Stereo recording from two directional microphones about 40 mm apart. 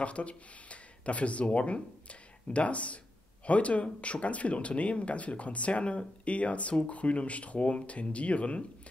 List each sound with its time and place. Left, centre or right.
0.0 s speech: left